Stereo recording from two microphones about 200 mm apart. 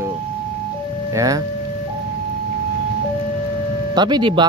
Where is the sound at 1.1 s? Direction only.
15° right (ahead or behind).